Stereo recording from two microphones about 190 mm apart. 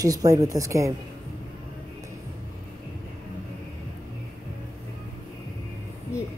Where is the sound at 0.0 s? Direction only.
20° right (ahead or behind).